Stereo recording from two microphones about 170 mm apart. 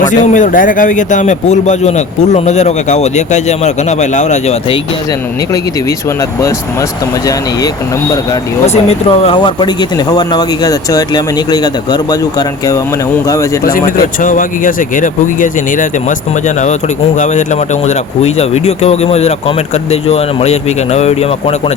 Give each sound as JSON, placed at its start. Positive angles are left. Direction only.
{"t": 0.3, "sound": "speech", "side_deg": 50}
{"t": 8.6, "sound": "speech", "side_deg": 40}
{"t": 14.2, "sound": "speech", "side_deg": 50}
{"t": 17.2, "sound": "speech", "side_deg": 45}